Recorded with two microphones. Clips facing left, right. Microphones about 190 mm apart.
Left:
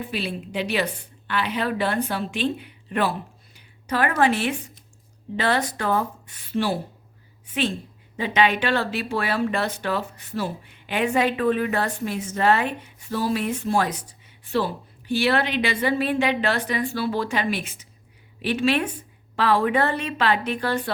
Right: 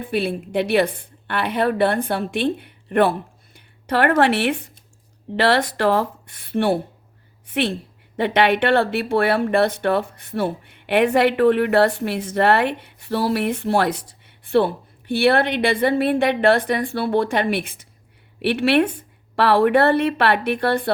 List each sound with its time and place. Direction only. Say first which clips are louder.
0.1 s speech: right 7 dB; 55° right (ahead or behind); by 6.1 s 70° right (ahead or behind)
6.5 s speech: right 5 dB; 60° right (ahead or behind)
8.1 s speech: right 4 dB; 60° right (ahead or behind)